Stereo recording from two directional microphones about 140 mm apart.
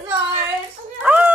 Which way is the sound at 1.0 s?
10° right (ahead or behind).